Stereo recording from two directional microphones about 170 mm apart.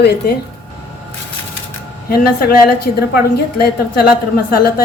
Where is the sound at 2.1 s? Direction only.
60° left (ahead or behind).